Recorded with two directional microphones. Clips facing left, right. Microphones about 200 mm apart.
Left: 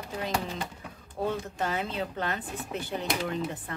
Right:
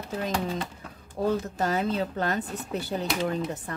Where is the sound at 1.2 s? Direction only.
40° right (ahead or behind).